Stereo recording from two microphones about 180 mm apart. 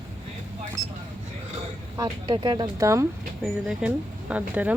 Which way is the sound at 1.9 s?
25° right (ahead or behind).